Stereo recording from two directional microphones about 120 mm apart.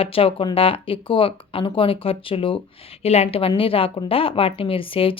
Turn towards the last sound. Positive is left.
turn(degrees=50)  # may be behind; listen again after turning